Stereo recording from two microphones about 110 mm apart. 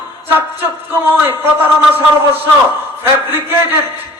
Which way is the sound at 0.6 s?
20° right (ahead or behind).